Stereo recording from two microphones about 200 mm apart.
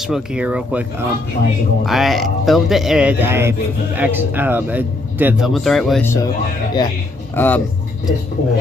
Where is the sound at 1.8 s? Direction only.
Centre (ahead or behind).